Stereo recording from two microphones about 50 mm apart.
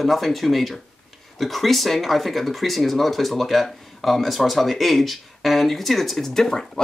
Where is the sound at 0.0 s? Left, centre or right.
Centre.